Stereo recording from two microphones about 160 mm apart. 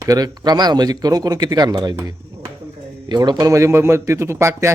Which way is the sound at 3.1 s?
25° right (ahead or behind).